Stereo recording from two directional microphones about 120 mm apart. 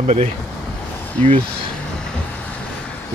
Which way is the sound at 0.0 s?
70° right (ahead or behind).